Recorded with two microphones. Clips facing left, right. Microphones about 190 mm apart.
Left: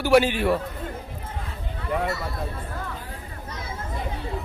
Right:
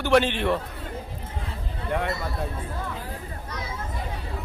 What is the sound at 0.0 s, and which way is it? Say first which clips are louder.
Speech: left 2 dB; 5° left (ahead or behind).